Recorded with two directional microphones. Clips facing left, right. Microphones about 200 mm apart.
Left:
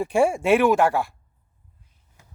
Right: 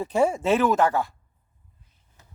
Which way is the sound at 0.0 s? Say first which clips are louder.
Left 2 dB; 10° left (ahead or behind).